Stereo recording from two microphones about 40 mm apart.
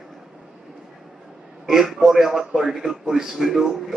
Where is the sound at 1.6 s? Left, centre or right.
Centre.